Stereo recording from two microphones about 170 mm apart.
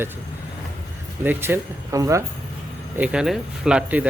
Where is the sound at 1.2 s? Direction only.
10° right (ahead or behind).